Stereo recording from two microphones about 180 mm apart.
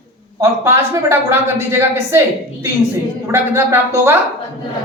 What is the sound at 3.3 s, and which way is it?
Speech, 15° right (ahead or behind).